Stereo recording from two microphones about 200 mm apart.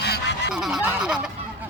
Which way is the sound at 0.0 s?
55° left (ahead or behind).